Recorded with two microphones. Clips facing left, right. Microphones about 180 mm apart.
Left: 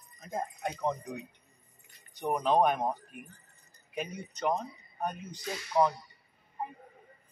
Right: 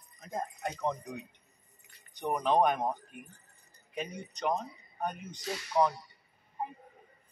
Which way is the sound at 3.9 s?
5° left (ahead or behind).